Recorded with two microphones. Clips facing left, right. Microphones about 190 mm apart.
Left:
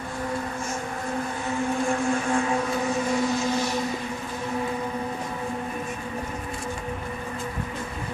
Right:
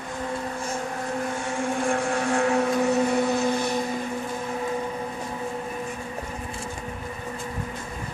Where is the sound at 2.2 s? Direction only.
70° right (ahead or behind); by 3.8 s 55° right (ahead or behind).